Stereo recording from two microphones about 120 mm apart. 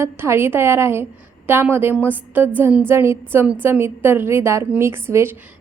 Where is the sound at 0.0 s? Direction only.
20° right (ahead or behind).